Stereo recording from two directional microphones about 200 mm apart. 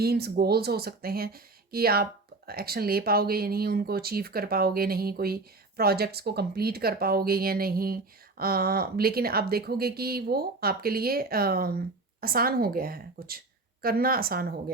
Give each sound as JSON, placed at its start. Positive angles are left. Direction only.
{"t": 0.0, "sound": "speech", "side_deg": -50}